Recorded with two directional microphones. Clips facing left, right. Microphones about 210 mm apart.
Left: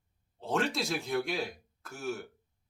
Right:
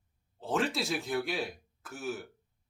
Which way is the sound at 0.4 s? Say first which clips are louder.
Even; centre (ahead or behind).